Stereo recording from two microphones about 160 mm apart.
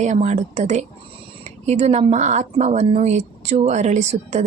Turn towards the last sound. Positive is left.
turn(degrees=-45)  # may be behind; listen again after turning